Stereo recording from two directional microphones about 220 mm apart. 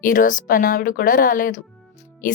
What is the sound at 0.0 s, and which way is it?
Speech, 40° left (ahead or behind).